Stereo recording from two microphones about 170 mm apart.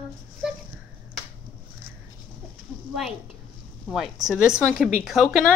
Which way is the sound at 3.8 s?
Centre (ahead or behind).